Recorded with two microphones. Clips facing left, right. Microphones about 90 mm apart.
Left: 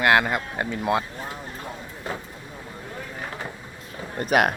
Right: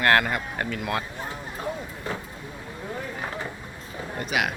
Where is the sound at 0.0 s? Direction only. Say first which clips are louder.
Left 2 dB; 15° left (ahead or behind).